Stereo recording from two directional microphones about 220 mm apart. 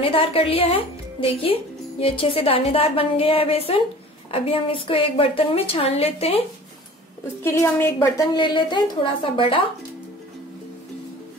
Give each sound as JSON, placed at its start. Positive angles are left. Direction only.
{"t": 0.0, "sound": "speech", "side_deg": 25}
{"t": 7.4, "sound": "speech", "side_deg": 10}